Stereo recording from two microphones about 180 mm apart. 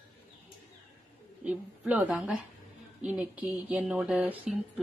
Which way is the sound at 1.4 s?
5° right (ahead or behind).